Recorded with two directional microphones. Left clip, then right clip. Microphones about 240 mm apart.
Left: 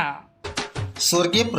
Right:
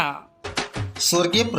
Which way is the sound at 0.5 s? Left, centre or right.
Centre.